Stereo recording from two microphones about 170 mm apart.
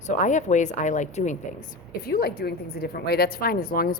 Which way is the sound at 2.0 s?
65° left (ahead or behind).